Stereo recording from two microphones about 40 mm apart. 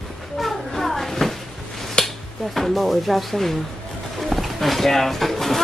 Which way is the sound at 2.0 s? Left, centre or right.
Left.